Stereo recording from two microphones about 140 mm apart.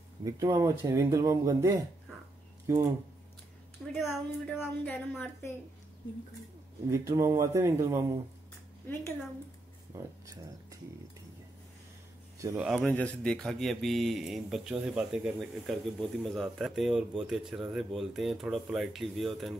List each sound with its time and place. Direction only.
0.2 s speech: 25° right (ahead or behind)
3.8 s a woman's voice: 10° left (ahead or behind)
6.9 s speech: 20° right (ahead or behind)
9.9 s speech: 25° right (ahead or behind)
12.5 s speech: 5° right (ahead or behind)
12.8 s speech: 10° left (ahead or behind)